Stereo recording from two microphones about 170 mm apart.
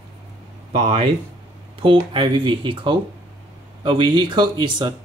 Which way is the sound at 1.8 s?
30° right (ahead or behind).